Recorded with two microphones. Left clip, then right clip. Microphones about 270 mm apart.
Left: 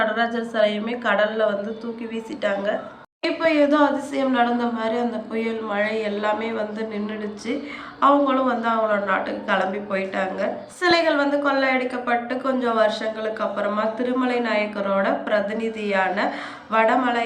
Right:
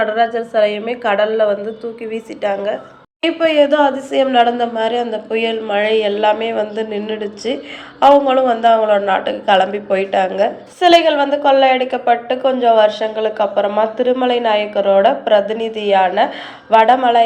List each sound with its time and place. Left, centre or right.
0.0 s a woman's voice: centre